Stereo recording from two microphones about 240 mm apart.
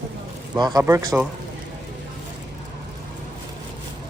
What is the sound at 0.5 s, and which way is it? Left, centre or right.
Speech, centre.